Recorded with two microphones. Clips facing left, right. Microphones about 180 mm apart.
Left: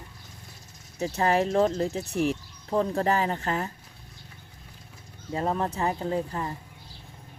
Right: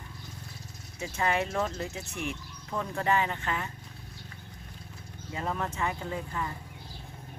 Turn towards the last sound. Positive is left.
turn(degrees=35)  # may be behind; listen again after turning